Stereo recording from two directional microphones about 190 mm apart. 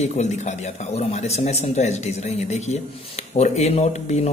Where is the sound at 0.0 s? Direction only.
35° left (ahead or behind).